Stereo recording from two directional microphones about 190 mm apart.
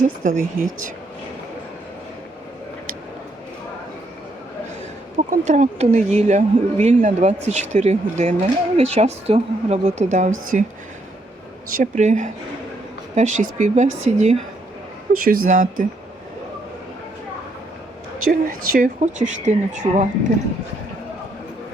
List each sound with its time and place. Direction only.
0.0 s speech: 40° right (ahead or behind)
5.3 s speech: 40° right (ahead or behind)
11.8 s speech: 40° right (ahead or behind)
15.1 s speech: 50° right (ahead or behind)
18.3 s speech: 45° right (ahead or behind)